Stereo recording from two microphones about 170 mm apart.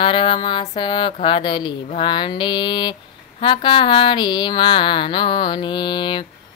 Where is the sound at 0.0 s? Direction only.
30° left (ahead or behind).